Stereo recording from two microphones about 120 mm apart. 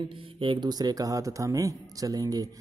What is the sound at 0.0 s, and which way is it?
Speech, 45° right (ahead or behind).